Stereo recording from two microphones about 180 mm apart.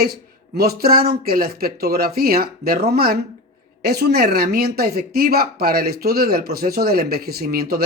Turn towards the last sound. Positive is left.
turn(degrees=-60)  # may be behind; listen again after turning